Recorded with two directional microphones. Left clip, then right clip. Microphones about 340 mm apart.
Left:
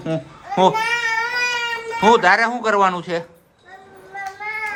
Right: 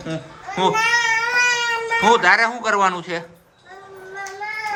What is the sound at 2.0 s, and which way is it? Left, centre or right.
Speech, centre.